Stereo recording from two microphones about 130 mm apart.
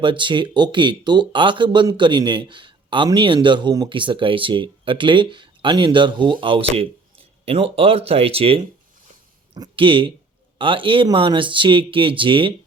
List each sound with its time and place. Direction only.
0.0 s speech: 40° right (ahead or behind)